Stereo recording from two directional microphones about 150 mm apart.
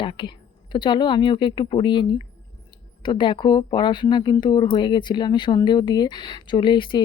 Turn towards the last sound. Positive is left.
turn(degrees=35)  # may be behind; listen again after turning